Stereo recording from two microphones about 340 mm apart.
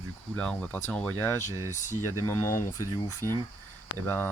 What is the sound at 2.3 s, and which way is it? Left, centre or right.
Speech, centre.